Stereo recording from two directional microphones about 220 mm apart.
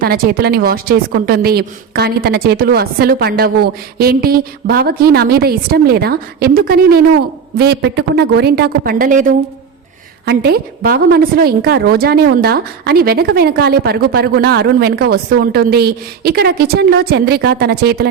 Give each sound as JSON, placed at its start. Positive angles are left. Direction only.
{"t": 0.0, "sound": "a woman's voice", "side_deg": -45}